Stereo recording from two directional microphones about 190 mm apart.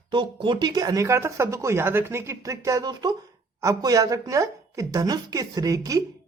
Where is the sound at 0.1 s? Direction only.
25° right (ahead or behind).